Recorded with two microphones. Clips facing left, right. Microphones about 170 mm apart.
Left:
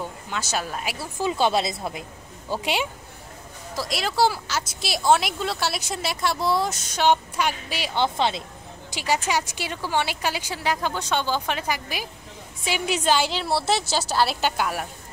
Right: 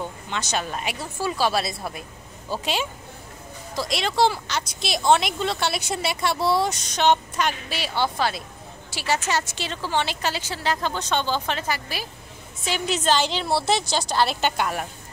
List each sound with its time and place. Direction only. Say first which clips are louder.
0.3 s a woman's voice: right 1 dB; 5° left (ahead or behind)
1.2 s a woman's voice: left 2 dB; 20° left (ahead or behind)
3.7 s a woman's voice: right 1 dB; centre (ahead or behind)